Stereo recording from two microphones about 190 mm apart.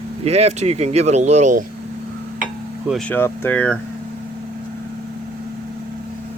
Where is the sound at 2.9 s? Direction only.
5° left (ahead or behind).